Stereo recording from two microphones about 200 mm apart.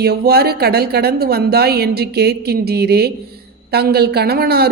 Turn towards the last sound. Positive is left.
turn(degrees=-55)  # may be behind; listen again after turning